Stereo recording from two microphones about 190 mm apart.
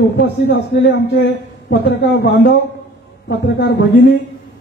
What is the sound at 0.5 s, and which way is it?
A man's voice, 60° left (ahead or behind).